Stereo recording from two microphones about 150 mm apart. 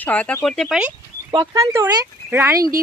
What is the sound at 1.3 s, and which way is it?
Speech, 35° right (ahead or behind).